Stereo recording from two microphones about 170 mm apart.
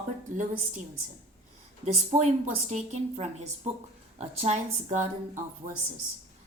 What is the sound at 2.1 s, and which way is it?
A woman's voice, 45° right (ahead or behind).